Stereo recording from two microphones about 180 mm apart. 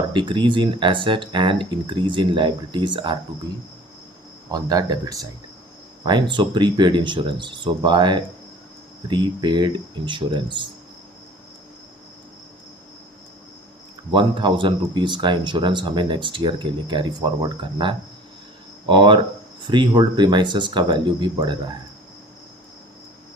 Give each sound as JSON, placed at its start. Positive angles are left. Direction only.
{"t": 0.1, "sound": "speech", "side_deg": -25}
{"t": 4.5, "sound": "speech", "side_deg": -20}
{"t": 14.1, "sound": "speech", "side_deg": -25}